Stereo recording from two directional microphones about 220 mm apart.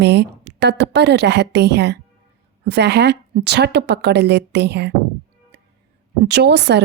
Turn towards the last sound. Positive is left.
turn(degrees=-50)  # may be behind; listen again after turning